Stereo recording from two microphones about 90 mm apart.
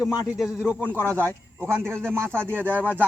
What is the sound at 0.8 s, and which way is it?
A man's voice, 20° right (ahead or behind).